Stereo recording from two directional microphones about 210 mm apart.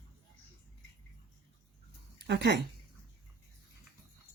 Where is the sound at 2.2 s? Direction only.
55° right (ahead or behind).